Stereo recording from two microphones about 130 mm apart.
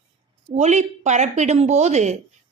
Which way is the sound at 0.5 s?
60° right (ahead or behind).